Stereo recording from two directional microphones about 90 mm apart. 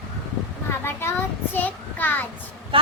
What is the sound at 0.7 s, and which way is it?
A child's voice, 25° left (ahead or behind).